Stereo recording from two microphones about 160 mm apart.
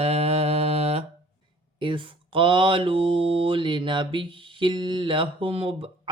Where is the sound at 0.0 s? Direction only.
40° right (ahead or behind).